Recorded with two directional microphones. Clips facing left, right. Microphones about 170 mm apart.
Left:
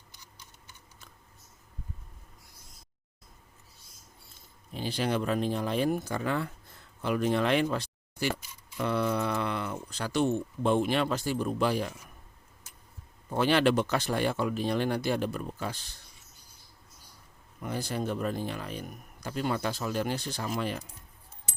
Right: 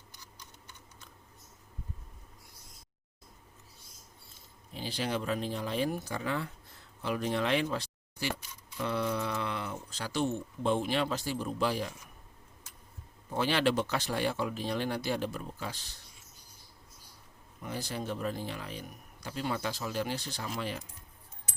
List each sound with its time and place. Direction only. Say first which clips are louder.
4.7 s speech: left 4 dB; 55° left (ahead or behind)
13.3 s speech: left 4 dB; 55° left (ahead or behind)
17.6 s speech: left 4 dB; 55° left (ahead or behind)